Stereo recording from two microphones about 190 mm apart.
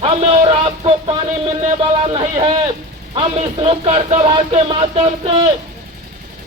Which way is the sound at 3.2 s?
25° right (ahead or behind).